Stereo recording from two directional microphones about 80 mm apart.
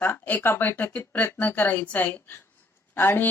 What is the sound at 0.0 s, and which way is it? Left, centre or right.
A woman's voice, left.